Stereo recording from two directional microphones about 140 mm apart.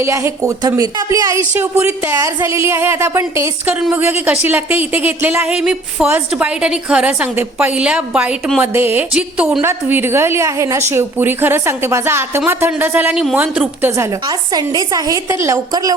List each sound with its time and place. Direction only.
0.0 s speech: 20° right (ahead or behind)
13.9 s speech: 20° right (ahead or behind)